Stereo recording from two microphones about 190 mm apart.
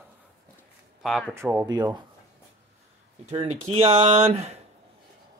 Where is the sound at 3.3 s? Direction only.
30° right (ahead or behind).